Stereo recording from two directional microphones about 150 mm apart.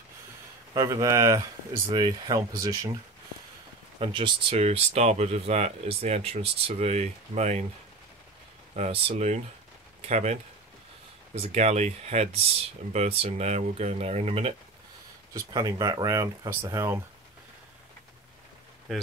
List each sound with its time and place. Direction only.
0.7 s speech: 25° right (ahead or behind)
4.0 s speech: 35° right (ahead or behind)
8.7 s speech: 45° right (ahead or behind)
15.3 s speech: 25° right (ahead or behind)